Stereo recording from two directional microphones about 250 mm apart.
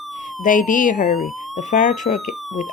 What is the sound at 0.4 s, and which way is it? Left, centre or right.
Speech, left.